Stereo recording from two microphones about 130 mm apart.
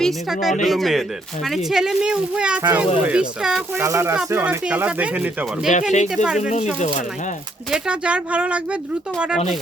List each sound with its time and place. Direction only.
0.6 s speech: centre (ahead or behind)
3.8 s speech: 20° right (ahead or behind)
5.9 s speech: 65° left (ahead or behind)
6.2 s speech: 5° right (ahead or behind)
6.7 s speech: 70° left (ahead or behind)
7.7 s speech: 10° right (ahead or behind)